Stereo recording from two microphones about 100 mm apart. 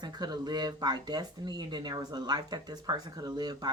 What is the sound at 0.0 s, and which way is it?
Speech, 45° right (ahead or behind).